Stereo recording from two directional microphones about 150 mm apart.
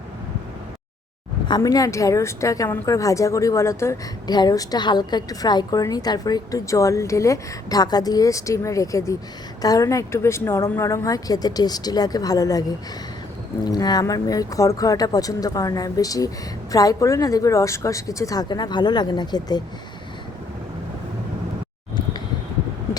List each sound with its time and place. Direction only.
1.5 s a woman's voice: 25° left (ahead or behind)
13.7 s a woman's voice: 25° left (ahead or behind)